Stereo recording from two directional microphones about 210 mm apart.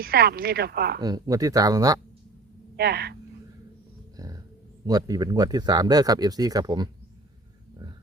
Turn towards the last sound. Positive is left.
turn(degrees=-20)  # may be behind; listen again after turning